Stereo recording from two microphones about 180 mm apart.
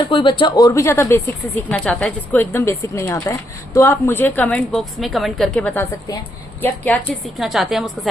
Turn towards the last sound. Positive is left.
turn(degrees=0)  # may be behind; listen again after turning